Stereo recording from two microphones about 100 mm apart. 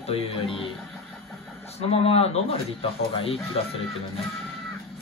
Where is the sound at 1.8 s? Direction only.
85° left.